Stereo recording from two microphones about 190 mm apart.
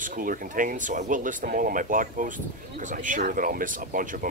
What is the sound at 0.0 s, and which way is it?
Speech, 45° right (ahead or behind).